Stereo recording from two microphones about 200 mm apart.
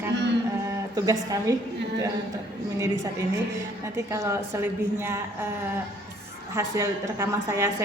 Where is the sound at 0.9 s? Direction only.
15° right (ahead or behind).